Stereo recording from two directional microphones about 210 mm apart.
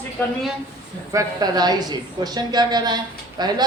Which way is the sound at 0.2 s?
10° left (ahead or behind).